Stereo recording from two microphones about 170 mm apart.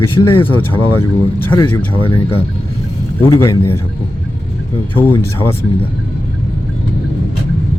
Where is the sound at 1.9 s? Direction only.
30° left (ahead or behind).